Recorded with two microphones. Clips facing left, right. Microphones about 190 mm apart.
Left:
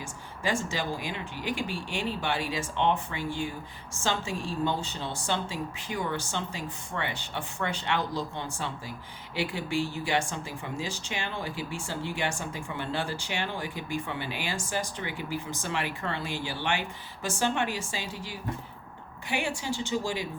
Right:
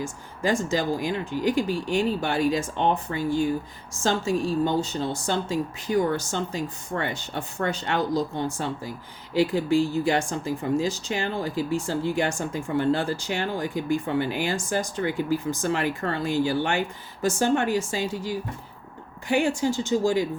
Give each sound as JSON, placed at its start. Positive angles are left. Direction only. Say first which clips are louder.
{"t": 0.0, "sound": "a woman's voice", "louder": "right 6 dB", "side_deg": -40}